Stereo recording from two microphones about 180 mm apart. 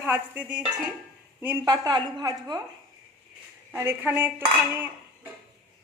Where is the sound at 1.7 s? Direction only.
20° right (ahead or behind).